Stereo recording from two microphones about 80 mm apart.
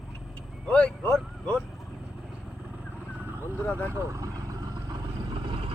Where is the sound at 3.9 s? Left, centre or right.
Right.